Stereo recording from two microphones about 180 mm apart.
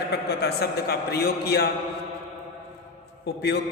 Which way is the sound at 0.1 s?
65° left (ahead or behind).